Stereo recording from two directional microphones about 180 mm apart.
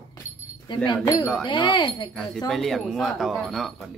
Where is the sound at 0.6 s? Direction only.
20° left (ahead or behind).